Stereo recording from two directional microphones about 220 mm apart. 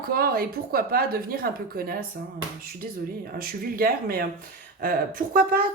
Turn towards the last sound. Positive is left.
turn(degrees=-40)  # may be behind; listen again after turning